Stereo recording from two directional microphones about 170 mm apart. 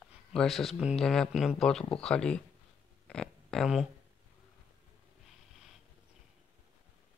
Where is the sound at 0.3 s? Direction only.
Centre (ahead or behind).